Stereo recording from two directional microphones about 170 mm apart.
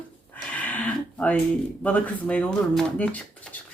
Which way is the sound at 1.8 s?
10° left (ahead or behind).